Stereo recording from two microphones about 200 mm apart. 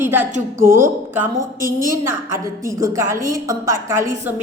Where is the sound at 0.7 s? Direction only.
10° right (ahead or behind).